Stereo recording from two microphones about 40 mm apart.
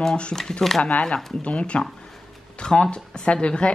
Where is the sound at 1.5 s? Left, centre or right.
Left.